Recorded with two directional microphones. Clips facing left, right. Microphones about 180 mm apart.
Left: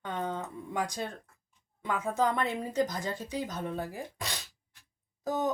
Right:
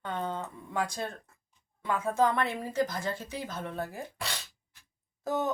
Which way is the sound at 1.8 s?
15° left (ahead or behind).